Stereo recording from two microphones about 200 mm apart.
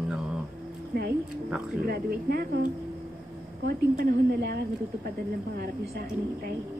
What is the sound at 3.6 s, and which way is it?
Speech, 50° right (ahead or behind).